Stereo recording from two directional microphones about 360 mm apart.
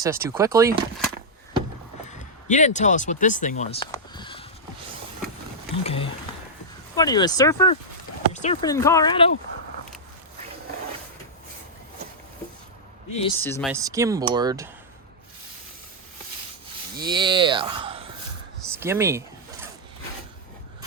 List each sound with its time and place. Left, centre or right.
0.0 s speech: centre
2.0 s speech: centre
5.8 s speech: centre
13.1 s speech: centre
17.1 s speech: centre
18.6 s a sound: centre